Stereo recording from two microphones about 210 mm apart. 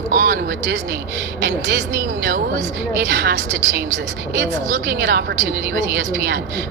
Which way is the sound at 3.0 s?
55° right (ahead or behind).